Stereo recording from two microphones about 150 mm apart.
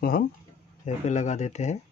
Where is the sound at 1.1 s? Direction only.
50° left (ahead or behind).